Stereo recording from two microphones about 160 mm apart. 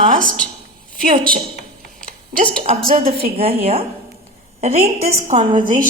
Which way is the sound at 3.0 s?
35° right (ahead or behind).